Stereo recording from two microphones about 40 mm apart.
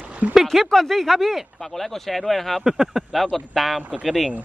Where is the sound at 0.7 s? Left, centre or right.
Centre.